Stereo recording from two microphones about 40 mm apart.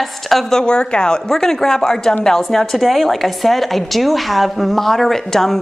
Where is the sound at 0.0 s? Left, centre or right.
Centre.